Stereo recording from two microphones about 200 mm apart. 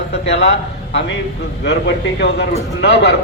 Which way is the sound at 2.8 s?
60° left (ahead or behind).